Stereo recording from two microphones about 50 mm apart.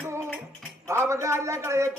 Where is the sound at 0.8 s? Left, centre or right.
Right.